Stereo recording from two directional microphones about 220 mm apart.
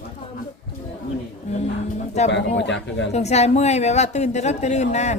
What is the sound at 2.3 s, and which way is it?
Speech, 55° left (ahead or behind).